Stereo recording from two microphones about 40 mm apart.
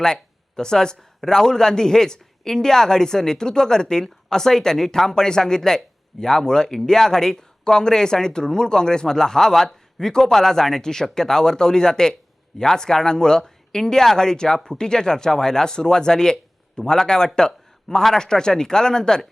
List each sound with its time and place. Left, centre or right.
0.0 s speech: centre